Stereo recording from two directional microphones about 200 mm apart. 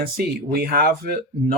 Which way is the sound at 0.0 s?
50° right (ahead or behind).